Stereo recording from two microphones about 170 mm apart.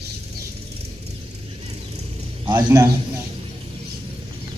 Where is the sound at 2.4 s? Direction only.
25° right (ahead or behind).